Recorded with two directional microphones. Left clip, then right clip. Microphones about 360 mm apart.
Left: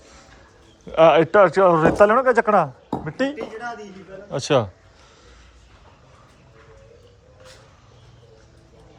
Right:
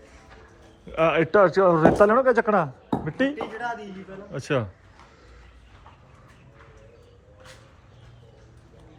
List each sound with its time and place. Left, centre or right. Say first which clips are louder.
0.9 s a man's voice: left 7 dB; centre